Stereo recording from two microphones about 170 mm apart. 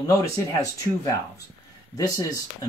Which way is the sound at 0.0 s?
20° left (ahead or behind).